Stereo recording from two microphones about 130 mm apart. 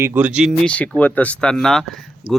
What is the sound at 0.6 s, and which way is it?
Speech, 10° left (ahead or behind).